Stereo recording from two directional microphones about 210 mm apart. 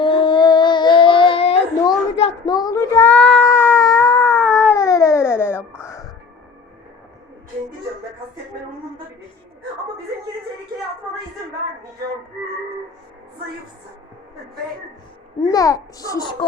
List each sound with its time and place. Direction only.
0.0 s child singing: 25° left (ahead or behind)
15.4 s a child's voice: 15° left (ahead or behind)